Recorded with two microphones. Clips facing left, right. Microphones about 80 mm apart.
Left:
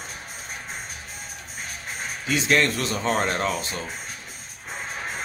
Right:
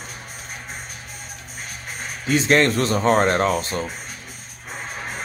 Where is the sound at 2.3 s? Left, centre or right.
Right.